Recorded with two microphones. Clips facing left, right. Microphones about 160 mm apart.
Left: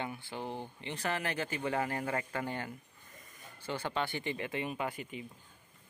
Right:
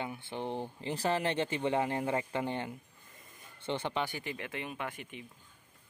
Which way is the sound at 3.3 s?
25° right (ahead or behind).